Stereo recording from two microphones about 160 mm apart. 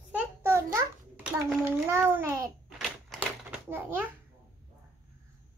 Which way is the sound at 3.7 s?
15° right (ahead or behind).